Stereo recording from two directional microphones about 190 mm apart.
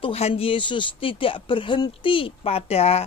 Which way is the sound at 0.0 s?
30° left (ahead or behind).